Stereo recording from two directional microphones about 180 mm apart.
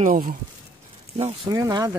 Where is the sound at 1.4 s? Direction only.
20° right (ahead or behind).